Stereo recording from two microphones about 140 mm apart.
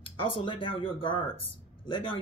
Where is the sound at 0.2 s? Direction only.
40° left (ahead or behind).